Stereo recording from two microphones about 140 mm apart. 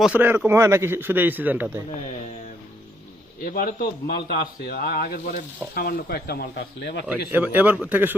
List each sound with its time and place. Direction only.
0.0 s a man's voice: 10° right (ahead or behind)
3.4 s a man's voice: 90° left
7.1 s a man's voice: 15° right (ahead or behind)